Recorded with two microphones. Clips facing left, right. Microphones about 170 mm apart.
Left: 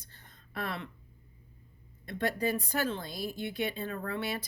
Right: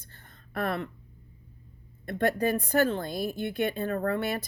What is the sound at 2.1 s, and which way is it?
A woman's voice, 55° right (ahead or behind).